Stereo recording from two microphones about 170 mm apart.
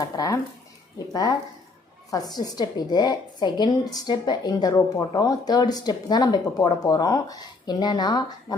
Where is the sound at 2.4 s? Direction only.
25° left (ahead or behind).